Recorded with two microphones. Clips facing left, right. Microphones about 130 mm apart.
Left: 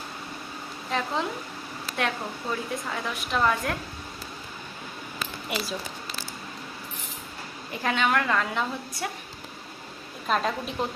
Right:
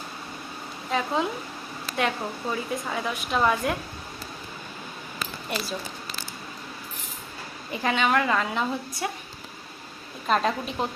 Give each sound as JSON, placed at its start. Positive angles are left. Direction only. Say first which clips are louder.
{"t": 0.9, "sound": "a woman's voice", "louder": "right 3 dB", "side_deg": -5}
{"t": 5.5, "sound": "speech", "louder": "even", "side_deg": 5}
{"t": 7.7, "sound": "a woman's voice", "louder": "right 2 dB", "side_deg": 0}
{"t": 10.2, "sound": "a woman's voice", "louder": "right 2 dB", "side_deg": 0}